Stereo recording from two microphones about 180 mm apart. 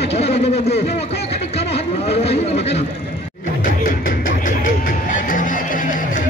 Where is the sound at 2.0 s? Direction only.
35° left (ahead or behind).